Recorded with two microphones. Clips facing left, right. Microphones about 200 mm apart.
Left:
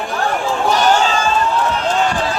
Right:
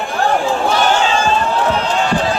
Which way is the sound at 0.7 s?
40° left (ahead or behind).